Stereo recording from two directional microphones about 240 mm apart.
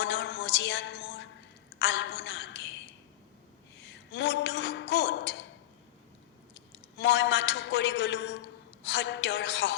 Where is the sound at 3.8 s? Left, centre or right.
Left.